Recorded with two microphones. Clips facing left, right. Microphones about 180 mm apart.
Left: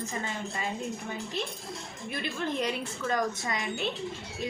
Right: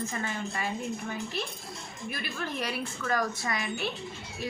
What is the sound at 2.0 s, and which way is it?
A woman's voice, 20° left (ahead or behind).